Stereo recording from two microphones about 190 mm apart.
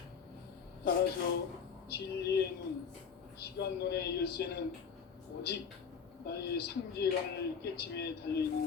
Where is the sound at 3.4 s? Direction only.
60° left (ahead or behind).